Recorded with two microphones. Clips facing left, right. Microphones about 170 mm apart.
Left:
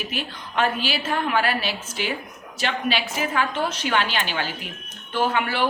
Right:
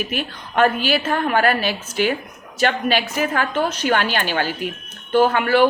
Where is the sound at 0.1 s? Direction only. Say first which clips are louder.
Right 5 dB; 50° right (ahead or behind).